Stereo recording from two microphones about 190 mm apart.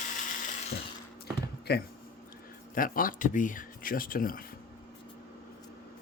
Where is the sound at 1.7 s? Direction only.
60° left (ahead or behind).